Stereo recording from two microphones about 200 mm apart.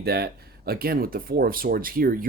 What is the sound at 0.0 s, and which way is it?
Speech, 50° right (ahead or behind).